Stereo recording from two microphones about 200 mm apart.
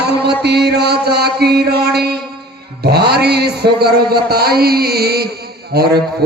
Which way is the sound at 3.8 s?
50° right (ahead or behind).